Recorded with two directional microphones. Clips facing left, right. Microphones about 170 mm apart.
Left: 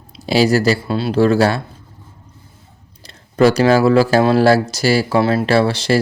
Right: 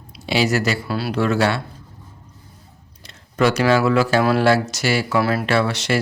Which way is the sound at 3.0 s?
35° left (ahead or behind).